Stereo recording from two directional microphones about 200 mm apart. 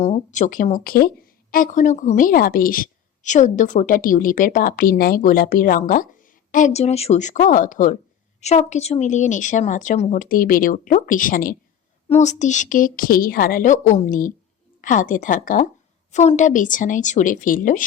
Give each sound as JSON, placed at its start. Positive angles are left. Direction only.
{"t": 0.0, "sound": "a woman's voice", "side_deg": 35}